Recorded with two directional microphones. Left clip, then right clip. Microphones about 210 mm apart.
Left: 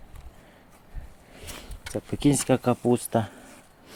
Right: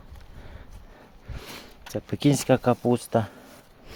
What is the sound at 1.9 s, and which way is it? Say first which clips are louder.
Speech: even; 20° right (ahead or behind).